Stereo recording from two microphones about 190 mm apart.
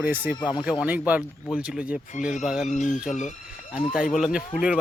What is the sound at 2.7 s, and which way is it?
Speech, 40° left (ahead or behind).